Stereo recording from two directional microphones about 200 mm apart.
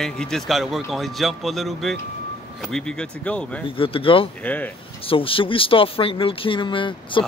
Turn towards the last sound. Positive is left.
turn(degrees=25)  # may be behind; listen again after turning